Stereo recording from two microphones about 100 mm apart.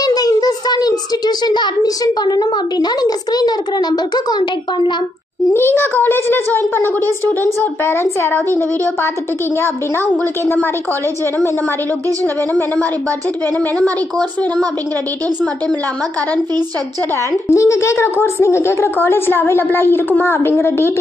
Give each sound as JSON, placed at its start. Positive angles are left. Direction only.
{"t": 0.0, "sound": "a child's voice", "side_deg": 40}
{"t": 5.5, "sound": "a child's voice", "side_deg": 20}
{"t": 7.2, "sound": "a child's voice", "side_deg": 25}
{"t": 13.7, "sound": "speech", "side_deg": 10}
{"t": 17.3, "sound": "a child's voice", "side_deg": 30}